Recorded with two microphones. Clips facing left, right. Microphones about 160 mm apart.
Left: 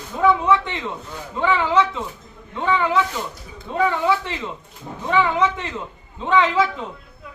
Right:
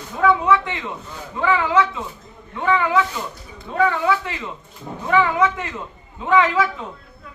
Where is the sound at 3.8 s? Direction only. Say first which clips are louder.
Right 1 dB; 20° left (ahead or behind).